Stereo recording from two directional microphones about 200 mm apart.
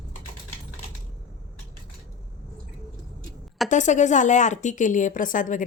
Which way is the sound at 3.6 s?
40° left (ahead or behind).